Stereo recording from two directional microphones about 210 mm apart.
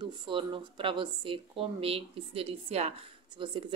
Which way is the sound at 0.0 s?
25° right (ahead or behind).